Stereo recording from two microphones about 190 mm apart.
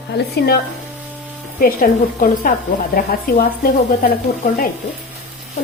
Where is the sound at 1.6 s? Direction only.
50° left (ahead or behind).